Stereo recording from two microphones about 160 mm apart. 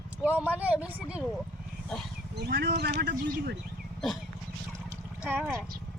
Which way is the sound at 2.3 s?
90° right.